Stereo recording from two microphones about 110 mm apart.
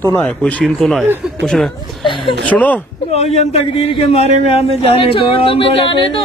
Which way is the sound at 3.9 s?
60° left (ahead or behind).